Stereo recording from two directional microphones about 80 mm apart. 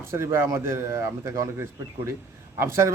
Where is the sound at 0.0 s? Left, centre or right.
Right.